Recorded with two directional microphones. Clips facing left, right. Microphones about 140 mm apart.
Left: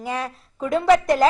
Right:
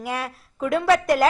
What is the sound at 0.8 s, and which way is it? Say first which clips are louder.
Speech: left 3 dB; 20° left (ahead or behind).